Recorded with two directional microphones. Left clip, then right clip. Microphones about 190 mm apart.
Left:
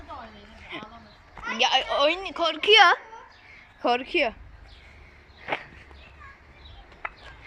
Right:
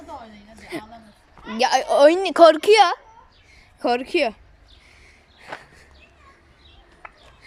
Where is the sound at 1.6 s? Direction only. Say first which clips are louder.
Right 7 dB; 30° right (ahead or behind).